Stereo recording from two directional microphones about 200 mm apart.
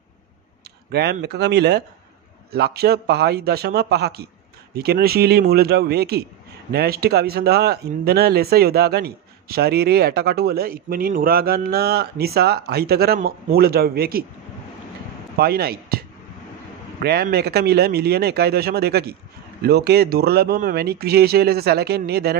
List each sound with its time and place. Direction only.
1.2 s speech: 55° right (ahead or behind)
15.3 s speech: 50° right (ahead or behind)
17.0 s speech: 55° right (ahead or behind)